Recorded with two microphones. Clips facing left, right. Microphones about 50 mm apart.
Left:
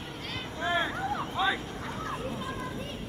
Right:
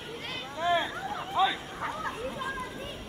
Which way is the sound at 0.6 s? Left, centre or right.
Centre.